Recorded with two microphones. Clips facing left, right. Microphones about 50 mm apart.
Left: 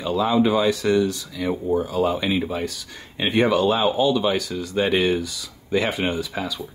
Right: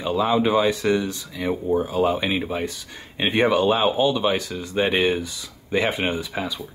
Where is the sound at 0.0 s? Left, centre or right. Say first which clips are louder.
Left 1 dB; centre.